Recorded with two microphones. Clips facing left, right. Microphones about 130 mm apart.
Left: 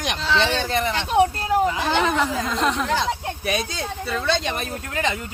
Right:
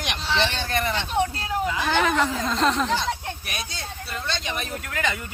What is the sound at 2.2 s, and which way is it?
Speech, 15° left (ahead or behind).